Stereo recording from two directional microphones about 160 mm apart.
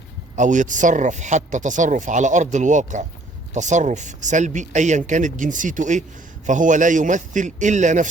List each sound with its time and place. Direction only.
0.3 s speech: 50° right (ahead or behind)